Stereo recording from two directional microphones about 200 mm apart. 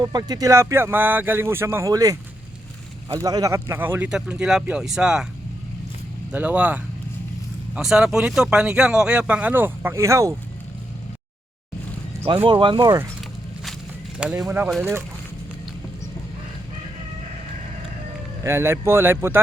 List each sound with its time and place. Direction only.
0.0 s speech: 20° right (ahead or behind); by 5.2 s 5° right (ahead or behind)
6.3 s speech: 5° right (ahead or behind)
12.5 s speech: 25° right (ahead or behind)
14.2 s speech: 5° right (ahead or behind)
18.4 s speech: 15° right (ahead or behind)